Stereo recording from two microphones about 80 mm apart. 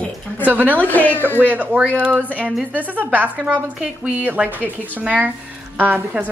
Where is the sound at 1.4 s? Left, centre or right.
Right.